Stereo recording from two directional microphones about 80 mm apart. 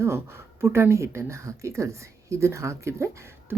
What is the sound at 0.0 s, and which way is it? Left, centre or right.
Speech, right.